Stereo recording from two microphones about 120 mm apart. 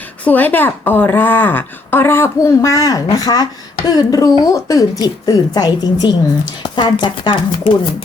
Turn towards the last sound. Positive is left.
turn(degrees=45)  # may be behind; listen again after turning